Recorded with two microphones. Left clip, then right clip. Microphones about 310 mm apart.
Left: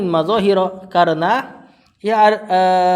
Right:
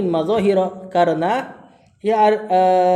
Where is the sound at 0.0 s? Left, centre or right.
Left.